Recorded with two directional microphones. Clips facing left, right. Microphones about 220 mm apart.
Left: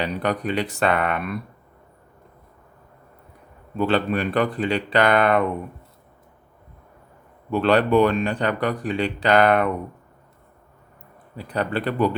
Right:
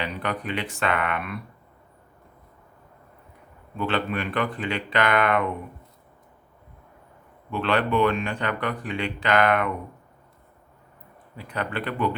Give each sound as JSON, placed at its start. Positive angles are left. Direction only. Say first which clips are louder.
{"t": 0.0, "sound": "speech", "louder": "left 5 dB", "side_deg": 40}
{"t": 3.8, "sound": "speech", "louder": "left 5 dB", "side_deg": 35}
{"t": 7.5, "sound": "speech", "louder": "left 6 dB", "side_deg": 40}
{"t": 11.3, "sound": "speech", "louder": "left 5 dB", "side_deg": 35}